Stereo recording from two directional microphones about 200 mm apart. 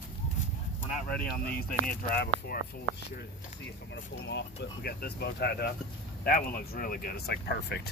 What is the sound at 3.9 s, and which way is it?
Speech, 60° left (ahead or behind).